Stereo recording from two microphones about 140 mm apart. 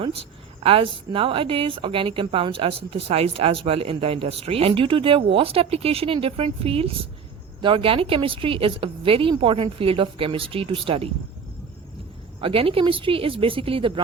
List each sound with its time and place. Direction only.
0.0 s a woman's voice: 40° right (ahead or behind)
12.4 s a woman's voice: 40° right (ahead or behind)